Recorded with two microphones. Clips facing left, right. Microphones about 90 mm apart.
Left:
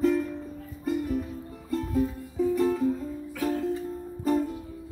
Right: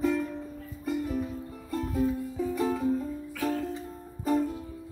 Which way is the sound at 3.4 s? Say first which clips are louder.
Left 3 dB; centre (ahead or behind).